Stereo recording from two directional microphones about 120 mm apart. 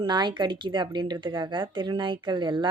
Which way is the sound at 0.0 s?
40° right (ahead or behind).